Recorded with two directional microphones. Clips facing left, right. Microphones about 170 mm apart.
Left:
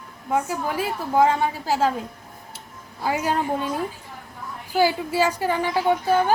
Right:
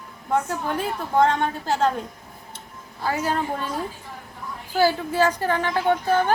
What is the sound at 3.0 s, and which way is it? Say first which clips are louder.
Speech: left 1 dB; 15° left (ahead or behind).